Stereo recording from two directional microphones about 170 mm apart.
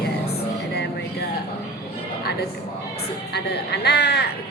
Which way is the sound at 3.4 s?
75° left (ahead or behind).